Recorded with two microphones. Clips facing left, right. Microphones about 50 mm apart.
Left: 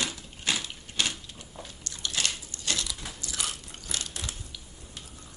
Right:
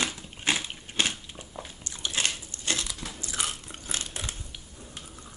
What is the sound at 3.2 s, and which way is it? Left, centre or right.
Biting, right.